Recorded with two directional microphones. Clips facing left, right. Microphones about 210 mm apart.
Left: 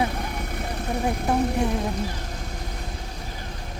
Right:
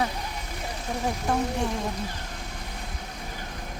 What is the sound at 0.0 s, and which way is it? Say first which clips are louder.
Vehicle: left 3 dB; 55° left (ahead or behind).